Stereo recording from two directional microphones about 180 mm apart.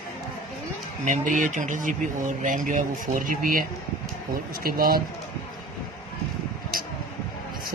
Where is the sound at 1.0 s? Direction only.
45° right (ahead or behind).